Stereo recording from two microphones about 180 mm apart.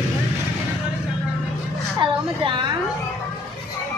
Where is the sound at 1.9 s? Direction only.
25° right (ahead or behind).